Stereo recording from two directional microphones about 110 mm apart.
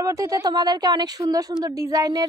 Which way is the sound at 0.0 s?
30° right (ahead or behind).